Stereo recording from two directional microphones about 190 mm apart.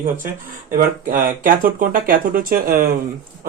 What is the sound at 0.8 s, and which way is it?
Speech, 50° right (ahead or behind).